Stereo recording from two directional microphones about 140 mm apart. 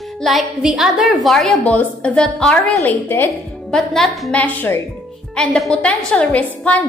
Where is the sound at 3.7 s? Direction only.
5° left (ahead or behind).